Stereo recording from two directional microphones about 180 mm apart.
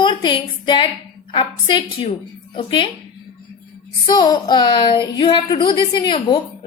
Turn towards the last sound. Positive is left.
turn(degrees=25)  # may be behind; listen again after turning